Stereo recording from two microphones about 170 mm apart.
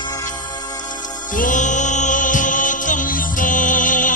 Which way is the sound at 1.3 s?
50° left (ahead or behind).